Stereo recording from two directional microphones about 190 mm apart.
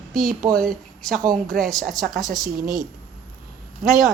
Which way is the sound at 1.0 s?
Centre (ahead or behind).